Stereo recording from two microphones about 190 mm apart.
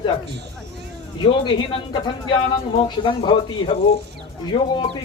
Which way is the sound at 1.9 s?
25° left (ahead or behind).